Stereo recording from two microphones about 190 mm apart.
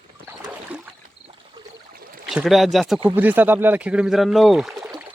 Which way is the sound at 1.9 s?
50° right (ahead or behind).